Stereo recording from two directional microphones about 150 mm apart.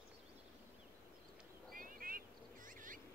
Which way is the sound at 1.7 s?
70° right (ahead or behind).